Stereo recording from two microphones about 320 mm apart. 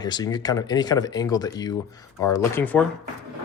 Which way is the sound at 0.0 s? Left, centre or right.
Centre.